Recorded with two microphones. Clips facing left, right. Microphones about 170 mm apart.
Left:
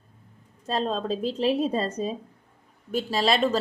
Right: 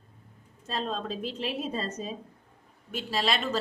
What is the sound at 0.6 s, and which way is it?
A woman's voice, 35° left (ahead or behind).